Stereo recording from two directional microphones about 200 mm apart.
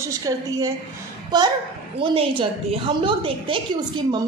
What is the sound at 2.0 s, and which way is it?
A woman's voice, 25° right (ahead or behind).